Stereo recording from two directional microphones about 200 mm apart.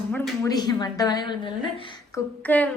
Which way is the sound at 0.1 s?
15° left (ahead or behind).